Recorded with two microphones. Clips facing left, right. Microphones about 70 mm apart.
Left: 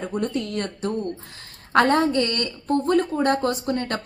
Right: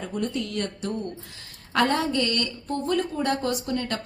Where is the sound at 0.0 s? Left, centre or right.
Left.